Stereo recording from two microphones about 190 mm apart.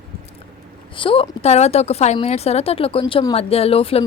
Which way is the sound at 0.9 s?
30° left (ahead or behind).